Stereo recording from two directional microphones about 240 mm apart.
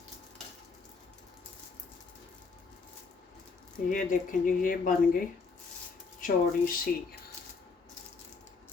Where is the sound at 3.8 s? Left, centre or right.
Left.